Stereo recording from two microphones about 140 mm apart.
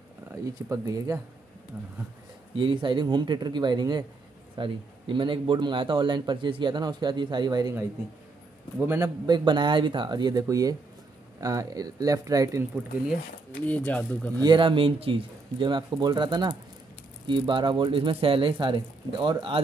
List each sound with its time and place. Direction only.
0.3 s speech: 25° right (ahead or behind)
2.5 s a man's voice: 35° right (ahead or behind)
8.7 s a man's voice: 15° right (ahead or behind)
9.2 s a man's voice: 30° right (ahead or behind)
13.7 s speech: 10° left (ahead or behind)
14.4 s a man's voice: 35° right (ahead or behind)